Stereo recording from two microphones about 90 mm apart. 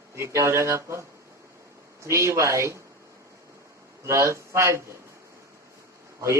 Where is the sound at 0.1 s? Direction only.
30° right (ahead or behind).